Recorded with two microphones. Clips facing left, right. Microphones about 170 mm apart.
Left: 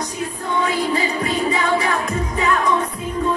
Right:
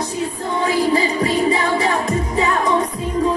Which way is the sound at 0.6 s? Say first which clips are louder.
Right 5 dB; 30° right (ahead or behind).